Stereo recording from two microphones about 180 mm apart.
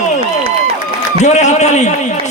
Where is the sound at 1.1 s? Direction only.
40° left (ahead or behind).